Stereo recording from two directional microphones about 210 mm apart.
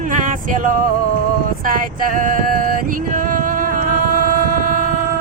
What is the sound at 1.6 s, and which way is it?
Female singing, 40° right (ahead or behind).